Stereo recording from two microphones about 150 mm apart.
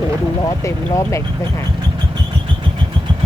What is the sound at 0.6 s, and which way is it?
Speech, 20° left (ahead or behind).